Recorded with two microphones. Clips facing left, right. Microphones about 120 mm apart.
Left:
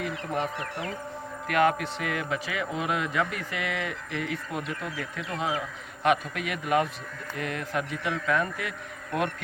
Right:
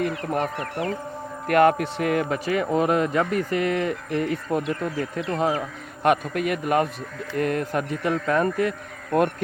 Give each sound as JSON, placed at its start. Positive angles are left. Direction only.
{"t": 0.0, "sound": "a man's voice", "side_deg": -50}